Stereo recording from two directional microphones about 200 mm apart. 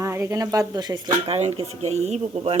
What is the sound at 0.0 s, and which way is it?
Speech, 15° right (ahead or behind).